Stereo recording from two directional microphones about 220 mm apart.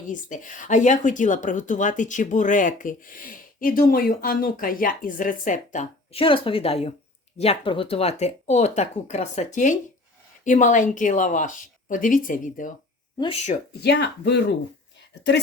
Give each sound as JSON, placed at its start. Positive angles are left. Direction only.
{"t": 0.1, "sound": "speech", "side_deg": 35}
{"t": 13.1, "sound": "speech", "side_deg": 25}
{"t": 13.8, "sound": "speech", "side_deg": 50}